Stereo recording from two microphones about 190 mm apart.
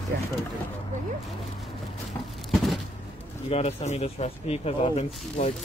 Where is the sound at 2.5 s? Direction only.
Centre (ahead or behind).